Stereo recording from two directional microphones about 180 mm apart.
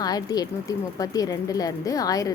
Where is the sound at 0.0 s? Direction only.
20° left (ahead or behind).